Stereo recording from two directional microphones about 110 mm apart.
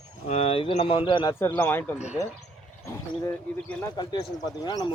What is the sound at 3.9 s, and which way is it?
Speech, 40° left (ahead or behind).